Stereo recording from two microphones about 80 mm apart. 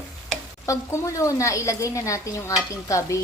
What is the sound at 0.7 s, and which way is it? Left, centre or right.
A woman's voice, left.